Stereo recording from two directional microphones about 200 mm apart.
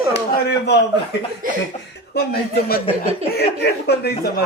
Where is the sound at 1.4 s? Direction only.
45° right (ahead or behind).